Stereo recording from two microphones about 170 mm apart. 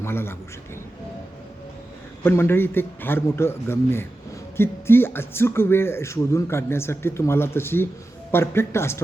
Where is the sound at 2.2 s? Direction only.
15° left (ahead or behind).